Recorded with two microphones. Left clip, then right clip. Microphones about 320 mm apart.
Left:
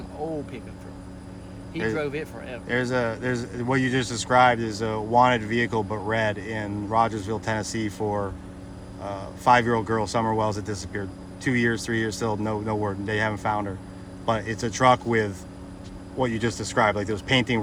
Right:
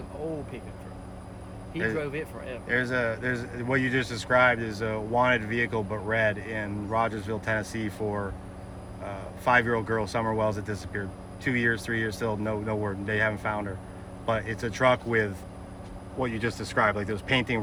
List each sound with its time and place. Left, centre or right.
1.7 s speech: centre